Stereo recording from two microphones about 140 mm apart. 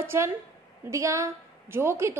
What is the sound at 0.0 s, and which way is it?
A woman's voice, 20° right (ahead or behind).